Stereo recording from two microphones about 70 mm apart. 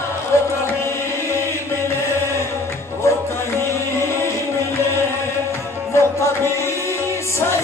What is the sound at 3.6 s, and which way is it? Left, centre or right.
Music, left.